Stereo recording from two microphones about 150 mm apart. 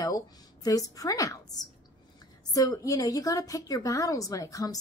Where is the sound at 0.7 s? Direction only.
25° left (ahead or behind).